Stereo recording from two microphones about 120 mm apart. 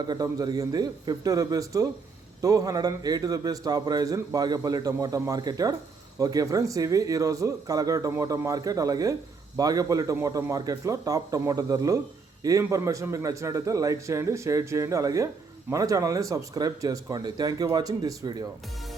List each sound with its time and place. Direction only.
0.1 s a man's voice: 35° right (ahead or behind)